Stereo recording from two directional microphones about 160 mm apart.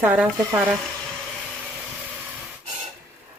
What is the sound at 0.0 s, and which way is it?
Speech, 10° right (ahead or behind).